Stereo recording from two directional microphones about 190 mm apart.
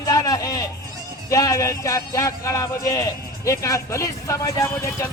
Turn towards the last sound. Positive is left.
turn(degrees=15)  # may be behind; listen again after turning